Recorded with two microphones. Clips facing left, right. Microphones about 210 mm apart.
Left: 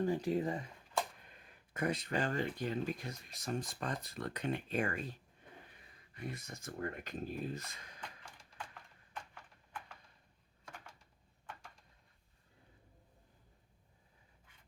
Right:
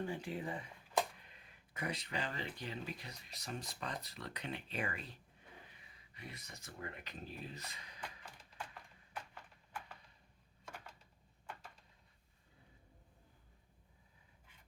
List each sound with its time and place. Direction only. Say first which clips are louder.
0.0 s speech: left 8 dB; 40° left (ahead or behind)
6.1 s speech: left 8 dB; 50° left (ahead or behind)
9.1 s horse: even; 5° right (ahead or behind)